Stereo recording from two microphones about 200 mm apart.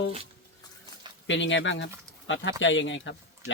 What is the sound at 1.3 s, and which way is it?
Speech, 65° left (ahead or behind).